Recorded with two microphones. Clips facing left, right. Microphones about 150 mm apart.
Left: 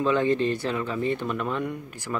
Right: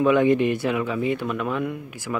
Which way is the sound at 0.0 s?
15° right (ahead or behind).